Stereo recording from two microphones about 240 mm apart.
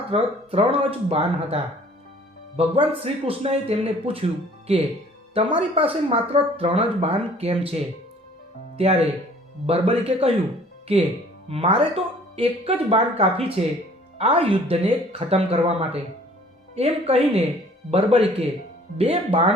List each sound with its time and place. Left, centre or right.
0.1 s speech: right
8.8 s speech: right
11.4 s speech: right